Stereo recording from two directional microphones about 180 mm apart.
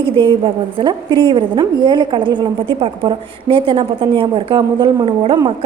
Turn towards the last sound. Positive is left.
turn(degrees=-25)  # may be behind; listen again after turning